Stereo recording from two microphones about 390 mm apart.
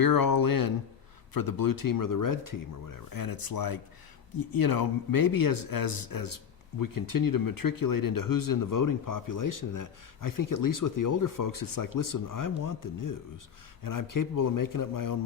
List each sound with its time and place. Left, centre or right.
0.0 s a man's voice: left